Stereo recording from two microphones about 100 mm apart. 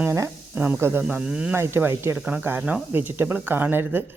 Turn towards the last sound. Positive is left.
turn(degrees=-20)  # may be behind; listen again after turning